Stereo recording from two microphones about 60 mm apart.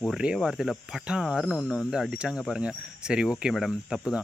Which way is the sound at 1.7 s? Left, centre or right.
Centre.